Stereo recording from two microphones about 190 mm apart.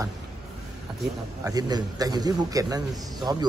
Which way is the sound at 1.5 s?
20° right (ahead or behind).